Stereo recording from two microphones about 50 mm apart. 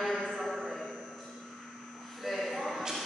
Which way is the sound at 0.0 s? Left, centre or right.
Centre.